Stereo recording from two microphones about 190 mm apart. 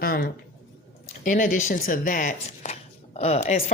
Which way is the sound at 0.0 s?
50° left (ahead or behind).